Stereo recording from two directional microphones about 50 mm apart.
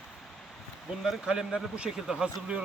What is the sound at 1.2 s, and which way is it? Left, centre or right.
Speech, centre.